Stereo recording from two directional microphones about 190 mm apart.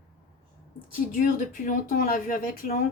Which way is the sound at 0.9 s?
45° left (ahead or behind).